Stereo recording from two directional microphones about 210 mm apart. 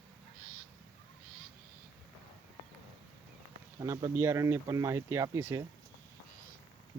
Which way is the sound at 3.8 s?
15° right (ahead or behind).